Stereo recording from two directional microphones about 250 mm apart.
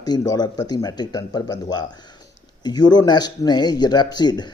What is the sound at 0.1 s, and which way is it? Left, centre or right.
Speech, centre.